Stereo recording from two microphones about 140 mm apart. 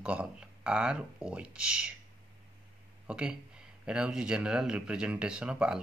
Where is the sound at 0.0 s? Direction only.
10° right (ahead or behind).